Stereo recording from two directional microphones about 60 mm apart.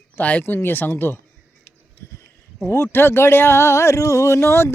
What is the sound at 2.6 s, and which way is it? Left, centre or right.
Speech, left.